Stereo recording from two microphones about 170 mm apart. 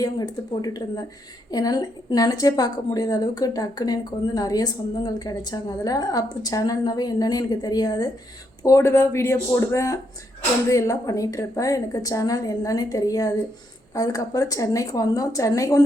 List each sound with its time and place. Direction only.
0.0 s a woman's voice: 20° left (ahead or behind)